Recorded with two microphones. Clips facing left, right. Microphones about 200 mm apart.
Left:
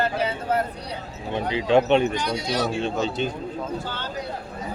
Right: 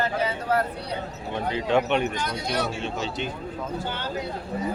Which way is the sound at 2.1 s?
50° right (ahead or behind).